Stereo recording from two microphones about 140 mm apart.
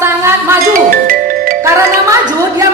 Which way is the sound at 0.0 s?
20° right (ahead or behind).